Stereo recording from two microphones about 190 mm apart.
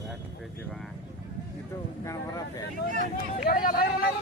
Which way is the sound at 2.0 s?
15° left (ahead or behind).